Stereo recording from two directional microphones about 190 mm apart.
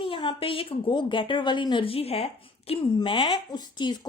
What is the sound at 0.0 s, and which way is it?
A woman's voice, 25° left (ahead or behind).